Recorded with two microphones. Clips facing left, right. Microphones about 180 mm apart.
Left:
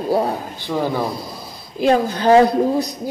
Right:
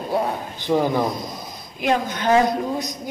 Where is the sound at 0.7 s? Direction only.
15° right (ahead or behind).